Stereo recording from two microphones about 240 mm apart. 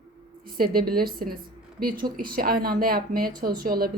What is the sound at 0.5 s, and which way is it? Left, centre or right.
A woman's voice, right.